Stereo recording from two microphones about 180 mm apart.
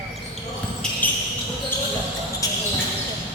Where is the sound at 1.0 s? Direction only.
10° left (ahead or behind).